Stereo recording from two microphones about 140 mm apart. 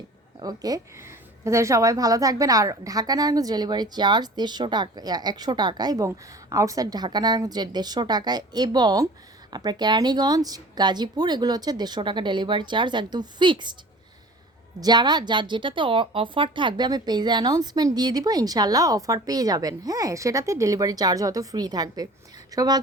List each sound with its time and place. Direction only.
0.3 s a woman's voice: 30° right (ahead or behind)
14.8 s a woman's voice: 30° right (ahead or behind)